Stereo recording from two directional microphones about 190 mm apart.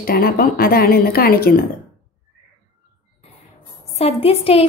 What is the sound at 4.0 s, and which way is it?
Speech, 30° left (ahead or behind).